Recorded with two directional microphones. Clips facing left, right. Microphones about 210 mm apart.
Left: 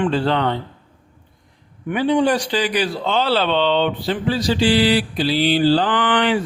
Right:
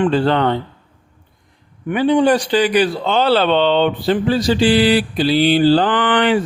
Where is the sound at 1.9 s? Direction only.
55° right (ahead or behind).